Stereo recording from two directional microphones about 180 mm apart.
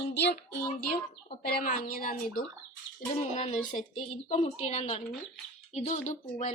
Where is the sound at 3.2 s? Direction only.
35° left (ahead or behind).